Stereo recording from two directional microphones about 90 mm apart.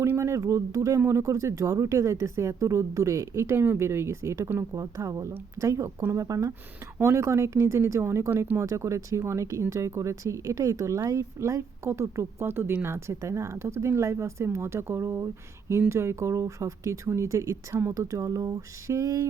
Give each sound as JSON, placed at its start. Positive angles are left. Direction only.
{"t": 0.2, "sound": "speech", "side_deg": -35}